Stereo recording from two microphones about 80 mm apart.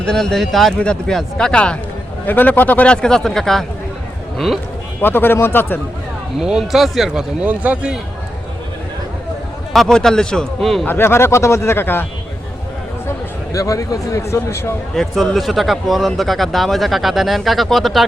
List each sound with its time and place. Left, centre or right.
0.0 s speech: centre
4.9 s speech: left
6.4 s speech: centre
7.4 s speech: centre
9.7 s speech: centre
10.8 s speech: left
13.5 s speech: left
14.9 s speech: centre